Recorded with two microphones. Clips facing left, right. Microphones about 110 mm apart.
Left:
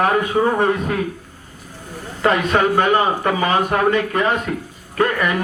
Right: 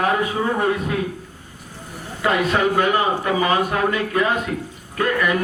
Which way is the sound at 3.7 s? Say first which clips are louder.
Left 3 dB; 45° left (ahead or behind).